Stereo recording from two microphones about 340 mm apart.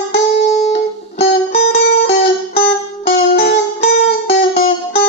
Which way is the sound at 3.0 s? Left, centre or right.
Left.